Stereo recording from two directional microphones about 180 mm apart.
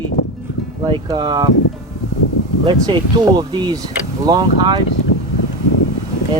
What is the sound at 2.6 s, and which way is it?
Speech, 25° right (ahead or behind).